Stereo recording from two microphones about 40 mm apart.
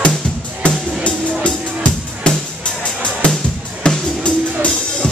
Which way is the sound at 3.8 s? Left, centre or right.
Left.